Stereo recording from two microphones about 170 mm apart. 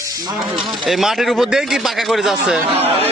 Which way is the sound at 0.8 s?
Centre (ahead or behind).